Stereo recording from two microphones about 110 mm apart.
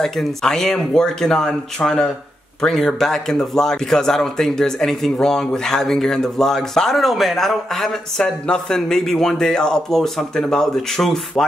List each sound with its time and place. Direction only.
0.0 s speech: 5° left (ahead or behind)